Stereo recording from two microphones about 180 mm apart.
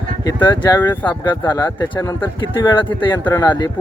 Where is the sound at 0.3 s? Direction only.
25° left (ahead or behind).